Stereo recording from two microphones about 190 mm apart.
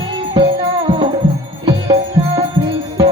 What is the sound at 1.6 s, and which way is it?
Music, 25° right (ahead or behind).